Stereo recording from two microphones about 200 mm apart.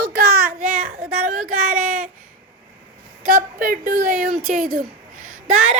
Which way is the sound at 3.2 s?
45° right (ahead or behind).